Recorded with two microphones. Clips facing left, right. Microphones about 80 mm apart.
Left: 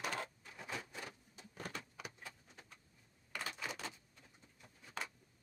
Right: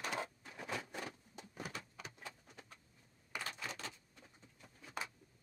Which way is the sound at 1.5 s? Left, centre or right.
Centre.